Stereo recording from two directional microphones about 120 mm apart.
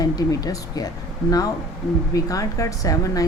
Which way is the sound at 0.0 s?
30° left (ahead or behind).